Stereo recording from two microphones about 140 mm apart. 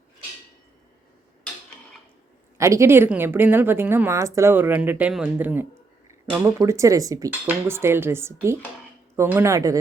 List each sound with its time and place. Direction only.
2.6 s a woman's voice: 20° right (ahead or behind)